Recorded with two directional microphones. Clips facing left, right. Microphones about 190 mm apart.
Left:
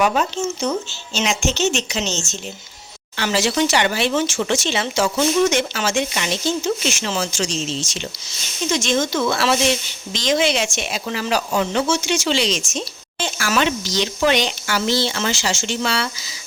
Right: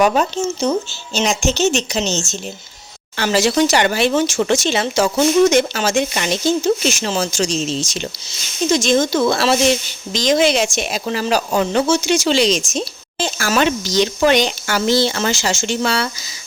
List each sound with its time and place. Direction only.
0.0 s speech: 40° right (ahead or behind)